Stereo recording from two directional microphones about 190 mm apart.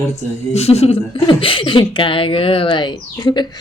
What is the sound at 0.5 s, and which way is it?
Speech, 35° left (ahead or behind).